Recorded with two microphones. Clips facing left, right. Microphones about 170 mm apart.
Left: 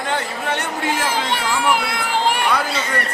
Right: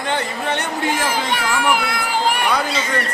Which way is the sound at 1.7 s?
25° left (ahead or behind).